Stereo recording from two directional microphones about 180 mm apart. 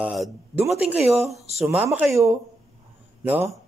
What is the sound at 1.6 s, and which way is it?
Speech, 10° right (ahead or behind).